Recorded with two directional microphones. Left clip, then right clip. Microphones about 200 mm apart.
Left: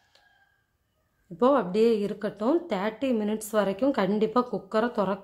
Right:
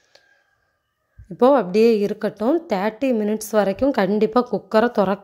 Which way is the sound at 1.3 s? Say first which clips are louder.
Right 7 dB; 30° right (ahead or behind).